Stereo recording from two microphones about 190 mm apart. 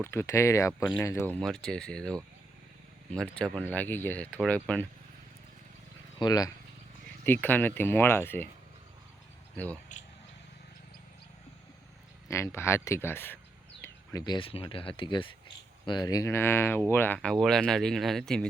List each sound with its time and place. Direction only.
0.0 s speech: 15° left (ahead or behind)
6.1 s speech: 20° left (ahead or behind)
7.4 s speech: 10° left (ahead or behind)
9.9 s speech: 40° left (ahead or behind)
12.3 s speech: 15° left (ahead or behind)